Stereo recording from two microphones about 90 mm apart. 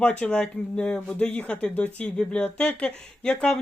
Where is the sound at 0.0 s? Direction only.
10° left (ahead or behind).